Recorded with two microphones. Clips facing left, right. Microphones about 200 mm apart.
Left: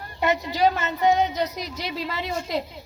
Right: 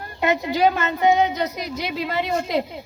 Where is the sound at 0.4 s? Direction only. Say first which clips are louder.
Right 3 dB; 55° right (ahead or behind).